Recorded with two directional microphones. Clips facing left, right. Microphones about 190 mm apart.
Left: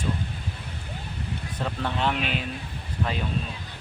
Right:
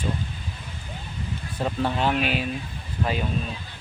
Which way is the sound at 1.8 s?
5° right (ahead or behind).